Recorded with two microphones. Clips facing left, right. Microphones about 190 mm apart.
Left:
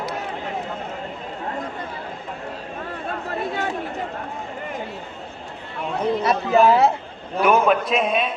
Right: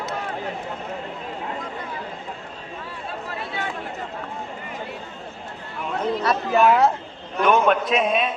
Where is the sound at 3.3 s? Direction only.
45° left (ahead or behind).